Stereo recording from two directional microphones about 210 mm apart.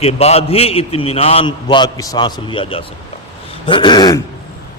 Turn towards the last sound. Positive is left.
turn(degrees=20)  # may be behind; listen again after turning